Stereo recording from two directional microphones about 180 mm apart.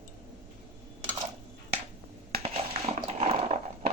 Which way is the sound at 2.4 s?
35° right (ahead or behind).